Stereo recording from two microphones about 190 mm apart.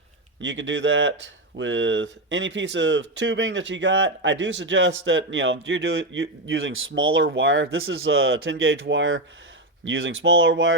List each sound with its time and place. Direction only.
0.3 s speech: 75° right (ahead or behind); by 7.3 s 90° right
7.3 s speech: 80° right